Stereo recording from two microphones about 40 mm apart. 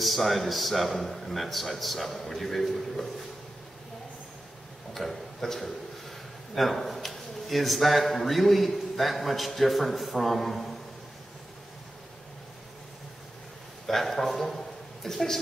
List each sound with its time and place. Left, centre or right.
0.0 s a man's voice: centre
4.9 s a man's voice: centre
13.8 s a man's voice: centre